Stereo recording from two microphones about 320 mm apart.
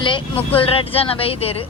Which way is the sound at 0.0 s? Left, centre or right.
Centre.